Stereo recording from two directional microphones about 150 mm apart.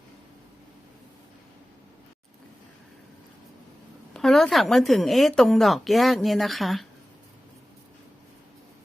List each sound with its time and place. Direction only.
4.1 s speech: centre (ahead or behind)